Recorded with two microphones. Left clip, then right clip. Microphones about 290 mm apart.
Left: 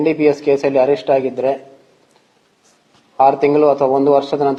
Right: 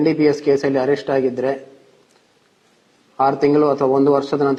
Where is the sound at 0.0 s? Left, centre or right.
Right.